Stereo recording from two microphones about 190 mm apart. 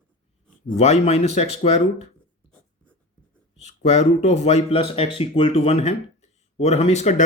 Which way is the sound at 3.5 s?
35° left (ahead or behind).